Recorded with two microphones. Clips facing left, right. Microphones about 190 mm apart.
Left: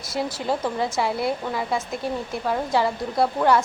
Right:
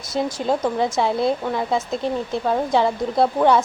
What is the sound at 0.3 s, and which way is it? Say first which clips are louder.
Speech: right 4 dB; 20° right (ahead or behind).